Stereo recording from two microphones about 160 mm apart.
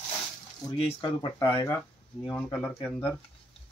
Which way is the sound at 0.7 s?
40° left (ahead or behind).